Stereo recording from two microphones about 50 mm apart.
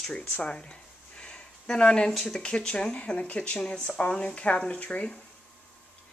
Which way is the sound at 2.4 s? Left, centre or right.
Centre.